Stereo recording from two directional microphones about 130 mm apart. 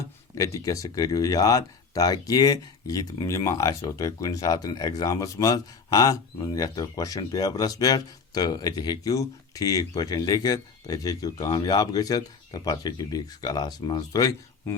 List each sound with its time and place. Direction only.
0.3 s speech: 25° left (ahead or behind)